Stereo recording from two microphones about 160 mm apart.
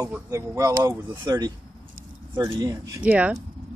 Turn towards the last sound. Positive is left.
turn(degrees=-10)  # may be behind; listen again after turning